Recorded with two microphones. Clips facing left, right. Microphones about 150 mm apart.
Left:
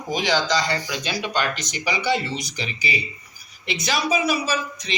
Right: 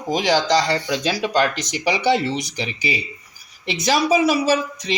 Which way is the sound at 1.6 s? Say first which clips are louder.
Right 5 dB; 80° right.